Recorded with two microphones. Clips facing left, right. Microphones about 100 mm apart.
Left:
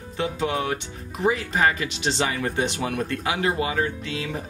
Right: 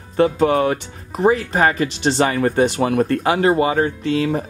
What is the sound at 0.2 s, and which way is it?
Speech, 50° right (ahead or behind).